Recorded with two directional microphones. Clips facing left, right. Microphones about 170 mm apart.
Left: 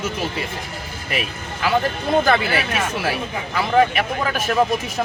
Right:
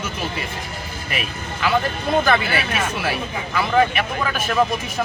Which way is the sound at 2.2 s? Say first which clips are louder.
Left 1 dB; 40° left (ahead or behind).